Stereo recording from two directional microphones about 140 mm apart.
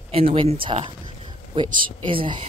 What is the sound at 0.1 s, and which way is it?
Speech, 45° right (ahead or behind).